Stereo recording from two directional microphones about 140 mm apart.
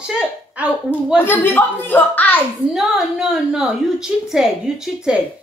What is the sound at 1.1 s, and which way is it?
A woman's voice, 15° left (ahead or behind).